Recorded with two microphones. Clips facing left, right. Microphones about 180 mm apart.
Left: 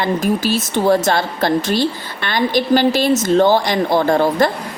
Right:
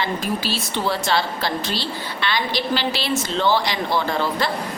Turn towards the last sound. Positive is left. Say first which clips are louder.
# left 8 dB
turn(degrees=50)  # may be behind; listen again after turning